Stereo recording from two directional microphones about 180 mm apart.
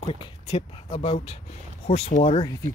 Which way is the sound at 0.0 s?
30° left (ahead or behind).